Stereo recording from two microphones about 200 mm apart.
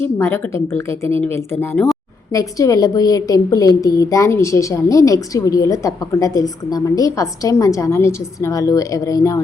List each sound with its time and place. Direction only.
0.0 s a woman's voice: 10° left (ahead or behind)
1.7 s speech: centre (ahead or behind)
2.3 s a woman's voice: 15° left (ahead or behind)